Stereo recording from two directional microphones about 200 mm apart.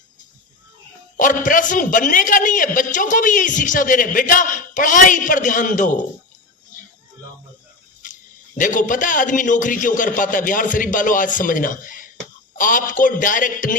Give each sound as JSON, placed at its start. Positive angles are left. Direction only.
{"t": 1.1, "sound": "a man's voice", "side_deg": 40}
{"t": 8.0, "sound": "a sound", "side_deg": 40}
{"t": 8.5, "sound": "a man's voice", "side_deg": 40}